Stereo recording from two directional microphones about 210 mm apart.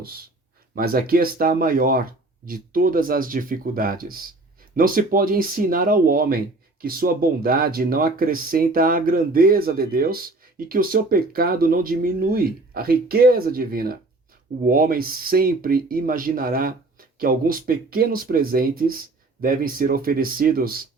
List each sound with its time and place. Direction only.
0.8 s speech: 45° right (ahead or behind)